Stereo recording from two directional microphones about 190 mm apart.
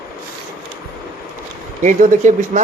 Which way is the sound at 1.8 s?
40° right (ahead or behind).